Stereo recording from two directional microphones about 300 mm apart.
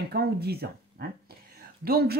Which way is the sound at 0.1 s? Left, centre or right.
Right.